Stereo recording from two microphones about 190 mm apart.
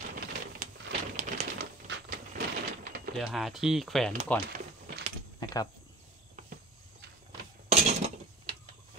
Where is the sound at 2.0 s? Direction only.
50° right (ahead or behind).